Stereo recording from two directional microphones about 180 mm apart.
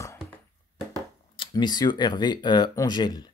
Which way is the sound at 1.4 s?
25° left (ahead or behind).